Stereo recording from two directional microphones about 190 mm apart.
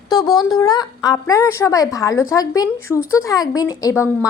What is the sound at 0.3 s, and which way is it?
A woman's voice, 20° left (ahead or behind).